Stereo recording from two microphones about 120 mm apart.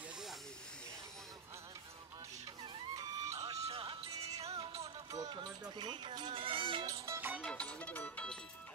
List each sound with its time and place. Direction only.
2.6 s music: 30° right (ahead or behind)
3.3 s a sound: 60° right (ahead or behind)
3.8 s music: 40° right (ahead or behind)
4.4 s music: 60° right (ahead or behind)
5.1 s music: 35° right (ahead or behind)
6.9 s music: 20° right (ahead or behind)
7.4 s music: 10° left (ahead or behind)